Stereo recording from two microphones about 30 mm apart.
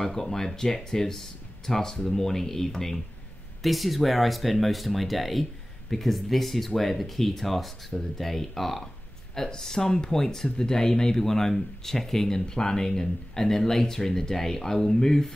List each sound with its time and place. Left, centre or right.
0.0 s speech: centre
3.6 s speech: centre